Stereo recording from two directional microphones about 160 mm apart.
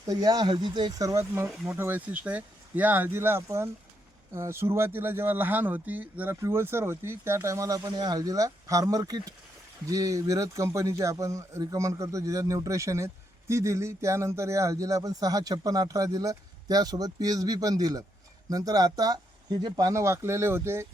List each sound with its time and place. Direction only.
0.1 s speech: 25° right (ahead or behind)